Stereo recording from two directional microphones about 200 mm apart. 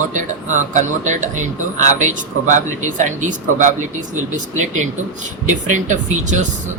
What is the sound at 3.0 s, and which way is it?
Speech, 40° right (ahead or behind).